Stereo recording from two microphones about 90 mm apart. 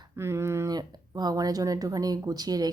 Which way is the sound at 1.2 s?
45° right (ahead or behind).